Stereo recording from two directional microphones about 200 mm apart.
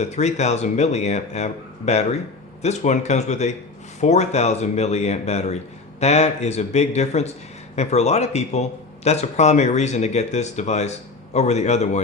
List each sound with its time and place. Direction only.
0.0 s speech: 35° left (ahead or behind)